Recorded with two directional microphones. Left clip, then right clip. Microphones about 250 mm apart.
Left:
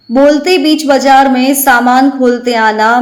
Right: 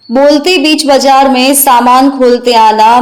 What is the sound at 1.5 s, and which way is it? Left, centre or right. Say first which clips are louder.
Speech: right 3 dB; right.